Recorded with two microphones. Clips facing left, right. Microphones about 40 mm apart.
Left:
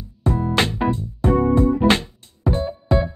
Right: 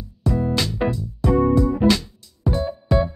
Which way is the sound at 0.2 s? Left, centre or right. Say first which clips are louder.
Left 2 dB; left.